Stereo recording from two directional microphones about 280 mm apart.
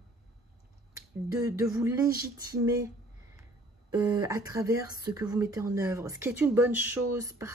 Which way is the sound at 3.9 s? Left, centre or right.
Centre.